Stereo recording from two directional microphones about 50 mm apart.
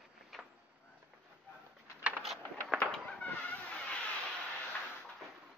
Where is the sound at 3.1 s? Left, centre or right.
Left.